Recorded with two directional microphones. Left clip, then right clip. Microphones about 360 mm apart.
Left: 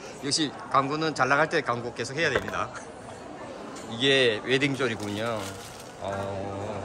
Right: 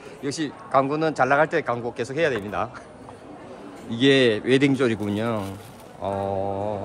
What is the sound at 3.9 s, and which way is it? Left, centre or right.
Speech, centre.